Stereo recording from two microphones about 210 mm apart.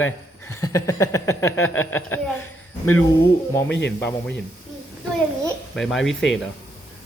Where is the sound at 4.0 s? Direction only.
10° left (ahead or behind).